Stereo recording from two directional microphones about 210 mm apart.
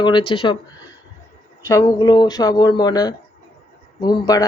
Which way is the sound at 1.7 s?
15° left (ahead or behind).